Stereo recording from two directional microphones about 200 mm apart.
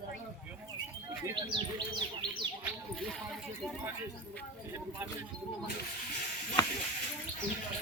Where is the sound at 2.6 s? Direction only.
Centre (ahead or behind).